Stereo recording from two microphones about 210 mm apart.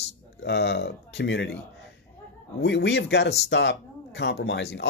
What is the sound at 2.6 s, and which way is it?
Speech, 55° left (ahead or behind).